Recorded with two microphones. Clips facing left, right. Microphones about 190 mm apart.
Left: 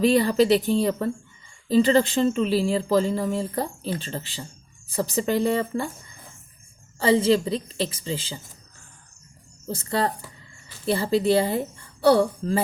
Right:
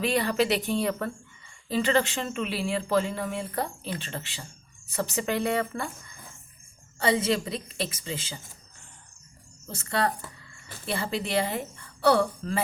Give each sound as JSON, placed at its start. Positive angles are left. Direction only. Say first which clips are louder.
{"t": 0.0, "sound": "speech", "louder": "left 6 dB", "side_deg": 35}
{"t": 7.0, "sound": "speech", "louder": "left 6 dB", "side_deg": 30}
{"t": 9.6, "sound": "speech", "louder": "left 3 dB", "side_deg": 30}